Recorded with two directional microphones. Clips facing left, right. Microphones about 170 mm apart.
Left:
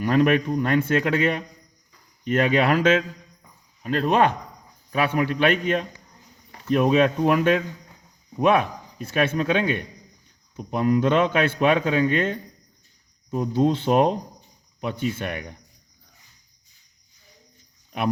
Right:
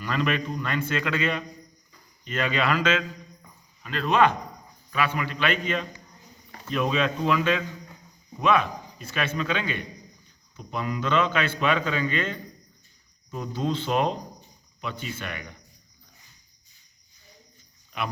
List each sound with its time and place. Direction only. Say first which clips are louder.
0.0 s a man's voice: left 8 dB; 55° left (ahead or behind)